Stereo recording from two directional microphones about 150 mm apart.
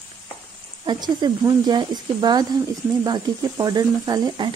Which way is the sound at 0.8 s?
30° right (ahead or behind).